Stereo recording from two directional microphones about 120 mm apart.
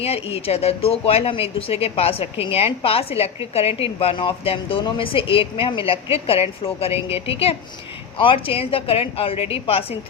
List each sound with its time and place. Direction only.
0.0 s a woman's voice: 55° left (ahead or behind)